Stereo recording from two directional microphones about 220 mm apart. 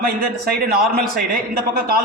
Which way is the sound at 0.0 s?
45° right (ahead or behind).